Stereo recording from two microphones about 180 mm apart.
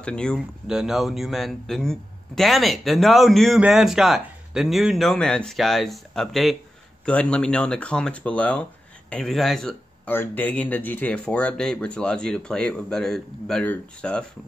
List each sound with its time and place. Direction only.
0.0 s speech: 5° left (ahead or behind)